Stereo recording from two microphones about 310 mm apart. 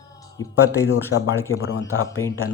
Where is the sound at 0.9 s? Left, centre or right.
Left.